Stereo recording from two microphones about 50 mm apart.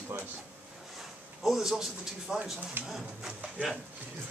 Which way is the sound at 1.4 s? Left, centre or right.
Centre.